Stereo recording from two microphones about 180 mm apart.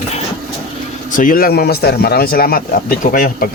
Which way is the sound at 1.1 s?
50° left (ahead or behind).